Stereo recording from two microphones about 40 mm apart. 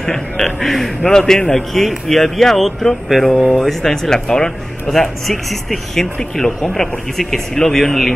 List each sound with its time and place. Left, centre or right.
0.0 s speech: centre